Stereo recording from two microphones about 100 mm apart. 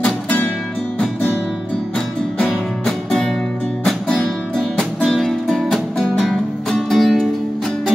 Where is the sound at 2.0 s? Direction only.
5° left (ahead or behind).